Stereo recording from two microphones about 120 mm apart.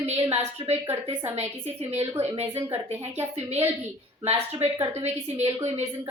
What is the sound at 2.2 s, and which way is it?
Speech, 60° right (ahead or behind).